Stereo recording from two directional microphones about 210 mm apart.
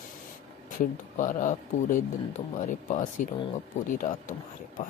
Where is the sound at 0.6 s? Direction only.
40° left (ahead or behind).